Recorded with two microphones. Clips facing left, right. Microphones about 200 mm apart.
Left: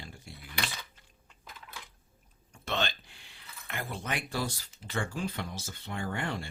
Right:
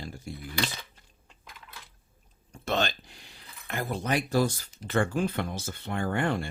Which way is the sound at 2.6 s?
45° right (ahead or behind).